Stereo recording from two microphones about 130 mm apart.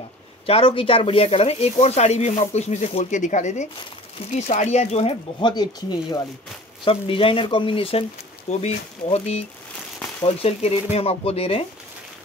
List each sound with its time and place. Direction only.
0.5 s speech: 45° left (ahead or behind)
5.4 s speech: 35° left (ahead or behind)
6.8 s speech: 45° left (ahead or behind)
8.5 s speech: 60° left (ahead or behind)